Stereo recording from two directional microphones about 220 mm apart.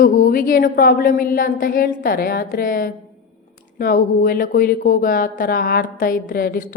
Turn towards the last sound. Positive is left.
turn(degrees=40)  # may be behind; listen again after turning